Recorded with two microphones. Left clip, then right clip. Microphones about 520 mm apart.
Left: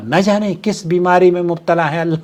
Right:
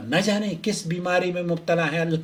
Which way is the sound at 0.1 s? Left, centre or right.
Left.